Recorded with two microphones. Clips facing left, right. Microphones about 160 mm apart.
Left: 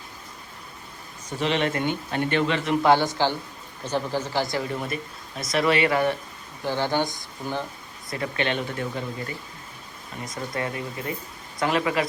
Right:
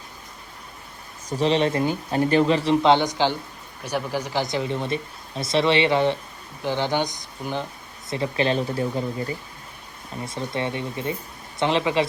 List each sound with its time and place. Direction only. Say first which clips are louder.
1.4 s speech: right 4 dB; 30° right (ahead or behind)
2.8 s speech: right 1 dB; 20° right (ahead or behind)
8.1 s speech: right 4 dB; 30° right (ahead or behind)